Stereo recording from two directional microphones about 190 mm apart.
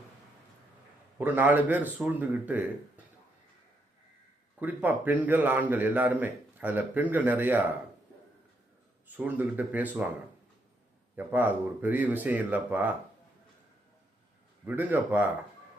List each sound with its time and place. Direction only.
1.2 s speech: 10° right (ahead or behind)
4.6 s speech: 10° right (ahead or behind)
9.1 s speech: 10° right (ahead or behind)
11.2 s speech: 10° right (ahead or behind)
14.6 s speech: 10° right (ahead or behind)